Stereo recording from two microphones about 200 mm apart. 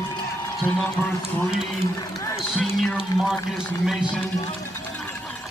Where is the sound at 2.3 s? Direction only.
Centre (ahead or behind).